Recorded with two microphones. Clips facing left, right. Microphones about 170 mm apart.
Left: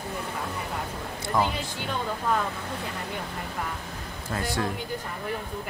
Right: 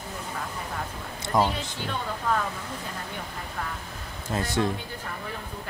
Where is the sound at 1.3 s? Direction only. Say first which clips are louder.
Right 2 dB; 20° right (ahead or behind).